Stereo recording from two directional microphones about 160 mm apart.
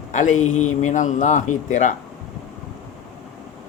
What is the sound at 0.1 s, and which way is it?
Speech, 50° left (ahead or behind).